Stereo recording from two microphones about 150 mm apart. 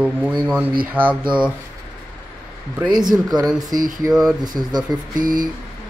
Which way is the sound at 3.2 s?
25° right (ahead or behind).